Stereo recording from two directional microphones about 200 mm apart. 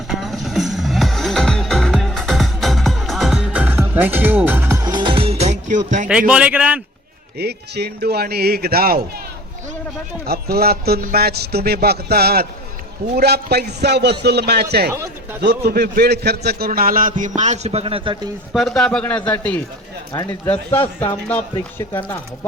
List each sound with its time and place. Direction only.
0.1 s music: centre (ahead or behind); by 6.1 s 40° right (ahead or behind)
6.1 s a man's voice: 5° right (ahead or behind)
7.3 s a man's voice: 55° right (ahead or behind)
10.2 s a man's voice: 50° right (ahead or behind)
14.9 s speech: 15° right (ahead or behind)
15.4 s a man's voice: 55° right (ahead or behind); by 18.2 s 25° right (ahead or behind)
18.5 s a man's voice: centre (ahead or behind)